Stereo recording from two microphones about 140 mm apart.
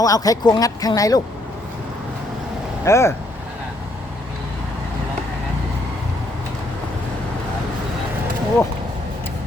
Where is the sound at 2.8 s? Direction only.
20° left (ahead or behind).